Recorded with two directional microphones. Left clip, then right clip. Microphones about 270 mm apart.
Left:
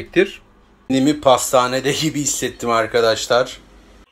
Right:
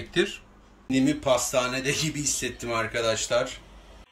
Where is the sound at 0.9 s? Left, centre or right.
Centre.